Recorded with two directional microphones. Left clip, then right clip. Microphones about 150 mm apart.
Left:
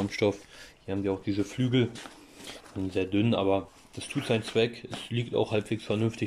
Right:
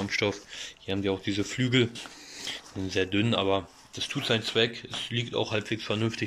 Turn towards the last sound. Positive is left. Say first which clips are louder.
# even
turn(degrees=20)  # may be behind; listen again after turning